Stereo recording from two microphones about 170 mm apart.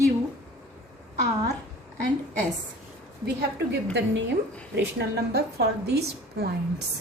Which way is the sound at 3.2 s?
85° right.